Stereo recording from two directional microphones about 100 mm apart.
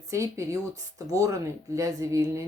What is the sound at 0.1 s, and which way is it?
Speech, 30° right (ahead or behind).